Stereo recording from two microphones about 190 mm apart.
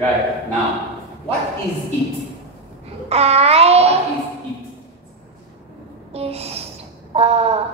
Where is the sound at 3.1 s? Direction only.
35° right (ahead or behind).